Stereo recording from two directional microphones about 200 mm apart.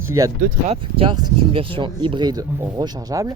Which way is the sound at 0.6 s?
30° right (ahead or behind).